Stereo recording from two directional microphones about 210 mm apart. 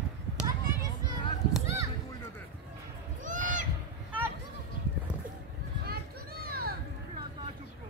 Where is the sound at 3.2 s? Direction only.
40° right (ahead or behind).